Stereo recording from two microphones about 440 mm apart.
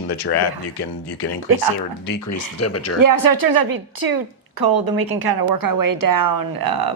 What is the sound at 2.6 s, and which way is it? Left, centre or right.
Speech, left.